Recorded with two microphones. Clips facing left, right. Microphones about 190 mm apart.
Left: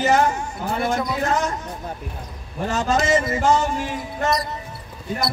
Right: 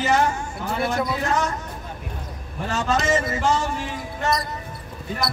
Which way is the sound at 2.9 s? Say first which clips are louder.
Left 2 dB; 25° left (ahead or behind).